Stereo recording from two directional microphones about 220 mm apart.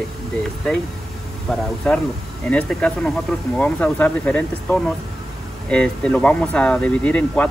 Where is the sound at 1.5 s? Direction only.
5° left (ahead or behind).